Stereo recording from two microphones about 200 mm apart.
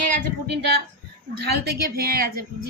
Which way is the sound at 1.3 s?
55° right (ahead or behind).